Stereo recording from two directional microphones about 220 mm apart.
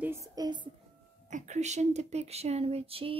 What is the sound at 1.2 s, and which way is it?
Speech, 35° right (ahead or behind).